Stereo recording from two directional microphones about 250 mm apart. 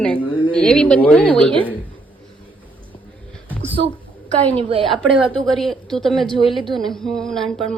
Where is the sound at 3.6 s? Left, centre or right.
Right.